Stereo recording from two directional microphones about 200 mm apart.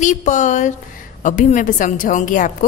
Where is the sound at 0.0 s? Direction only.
40° left (ahead or behind).